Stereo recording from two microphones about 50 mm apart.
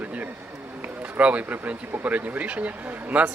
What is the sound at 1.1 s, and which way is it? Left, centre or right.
Speech, right.